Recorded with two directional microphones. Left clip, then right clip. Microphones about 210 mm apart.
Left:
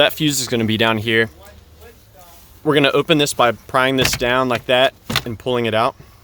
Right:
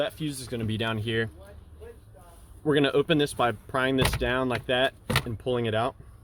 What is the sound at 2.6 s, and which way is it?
Speech, 35° left (ahead or behind).